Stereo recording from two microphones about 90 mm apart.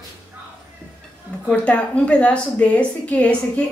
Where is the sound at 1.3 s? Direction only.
15° left (ahead or behind).